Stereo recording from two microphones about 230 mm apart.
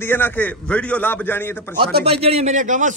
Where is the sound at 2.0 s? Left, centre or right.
Right.